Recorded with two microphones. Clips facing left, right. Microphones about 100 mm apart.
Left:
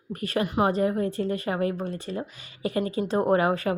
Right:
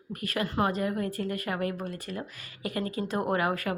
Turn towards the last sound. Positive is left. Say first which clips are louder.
# left 6 dB
turn(degrees=30)  # may be behind; listen again after turning